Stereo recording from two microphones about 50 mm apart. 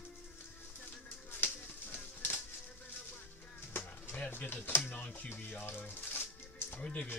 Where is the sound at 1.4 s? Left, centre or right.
Left.